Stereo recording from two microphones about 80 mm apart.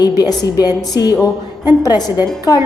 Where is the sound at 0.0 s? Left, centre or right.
Left.